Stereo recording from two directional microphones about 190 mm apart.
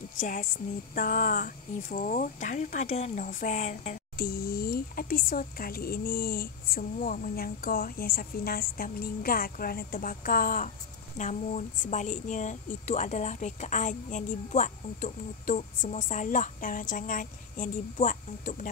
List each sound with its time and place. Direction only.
0.2 s a woman's voice: 45° left (ahead or behind)